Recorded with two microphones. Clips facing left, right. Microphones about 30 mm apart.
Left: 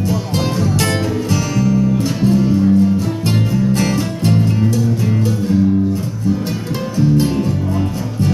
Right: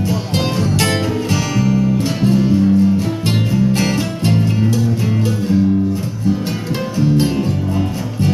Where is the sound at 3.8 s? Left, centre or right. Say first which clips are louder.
Even; centre.